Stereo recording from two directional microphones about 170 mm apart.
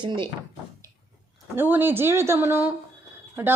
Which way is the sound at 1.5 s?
10° right (ahead or behind).